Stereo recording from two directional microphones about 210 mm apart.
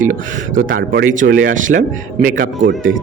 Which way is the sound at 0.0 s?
40° right (ahead or behind).